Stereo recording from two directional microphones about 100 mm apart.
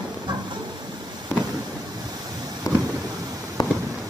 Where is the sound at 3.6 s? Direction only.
40° left (ahead or behind).